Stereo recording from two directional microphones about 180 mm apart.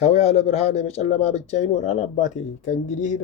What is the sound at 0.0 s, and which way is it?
Speech, 35° left (ahead or behind).